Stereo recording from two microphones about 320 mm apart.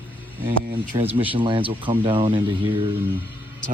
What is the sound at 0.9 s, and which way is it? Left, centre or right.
Speech, centre.